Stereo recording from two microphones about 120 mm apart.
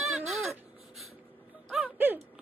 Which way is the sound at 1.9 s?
15° right (ahead or behind).